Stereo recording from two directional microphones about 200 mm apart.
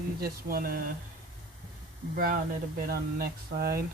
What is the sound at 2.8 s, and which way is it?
Speech, 50° right (ahead or behind).